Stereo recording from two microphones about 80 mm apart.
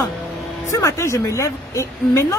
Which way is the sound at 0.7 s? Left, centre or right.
Left.